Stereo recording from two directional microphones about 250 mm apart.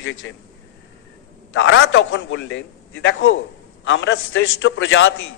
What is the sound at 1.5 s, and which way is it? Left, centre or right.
A man's voice, left.